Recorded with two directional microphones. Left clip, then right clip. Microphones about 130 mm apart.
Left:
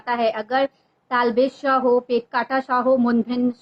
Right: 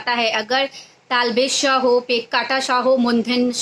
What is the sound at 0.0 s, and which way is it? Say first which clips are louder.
A woman's voice: right 2 dB; 15° right (ahead or behind).